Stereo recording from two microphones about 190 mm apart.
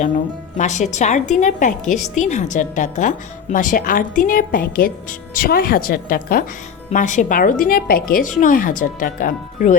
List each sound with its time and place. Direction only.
0.5 s a woman's voice: 40° left (ahead or behind)